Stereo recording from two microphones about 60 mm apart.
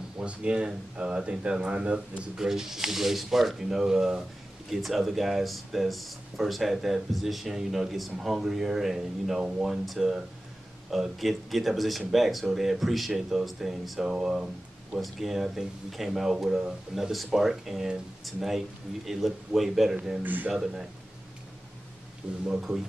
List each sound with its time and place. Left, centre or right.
0.2 s speech: centre
2.3 s speech: centre
22.2 s speech: centre